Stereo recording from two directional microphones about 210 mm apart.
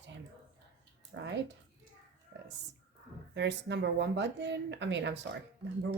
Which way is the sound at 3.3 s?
55° right (ahead or behind).